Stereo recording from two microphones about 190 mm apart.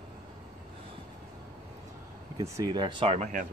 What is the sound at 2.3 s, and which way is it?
Speech, 15° right (ahead or behind).